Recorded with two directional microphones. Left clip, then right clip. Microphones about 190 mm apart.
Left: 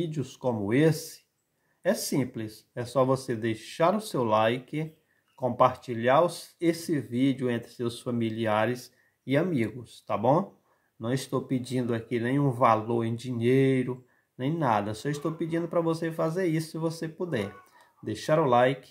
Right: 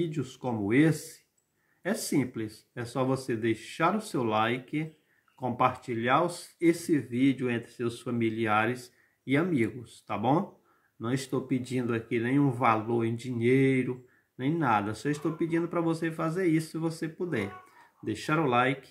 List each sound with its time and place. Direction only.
0.1 s speech: 30° left (ahead or behind)